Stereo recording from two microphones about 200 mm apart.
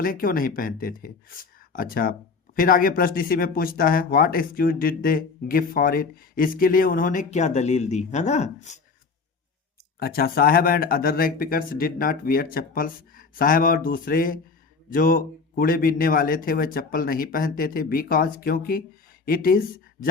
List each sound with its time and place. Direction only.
0.0 s speech: 45° left (ahead or behind)
10.0 s speech: 50° left (ahead or behind)